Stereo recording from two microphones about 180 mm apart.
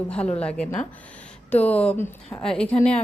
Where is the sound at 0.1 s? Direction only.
5° left (ahead or behind).